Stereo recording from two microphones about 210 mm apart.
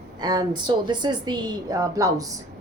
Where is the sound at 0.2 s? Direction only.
20° right (ahead or behind).